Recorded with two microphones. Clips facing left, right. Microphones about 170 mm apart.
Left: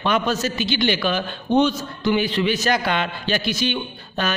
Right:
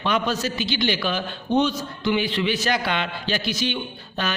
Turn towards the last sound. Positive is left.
turn(degrees=50)  # may be behind; listen again after turning